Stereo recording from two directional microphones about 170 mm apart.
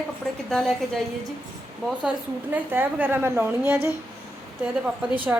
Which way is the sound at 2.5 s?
10° right (ahead or behind).